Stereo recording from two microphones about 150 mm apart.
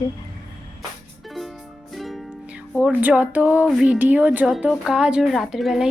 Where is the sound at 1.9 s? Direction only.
Centre (ahead or behind).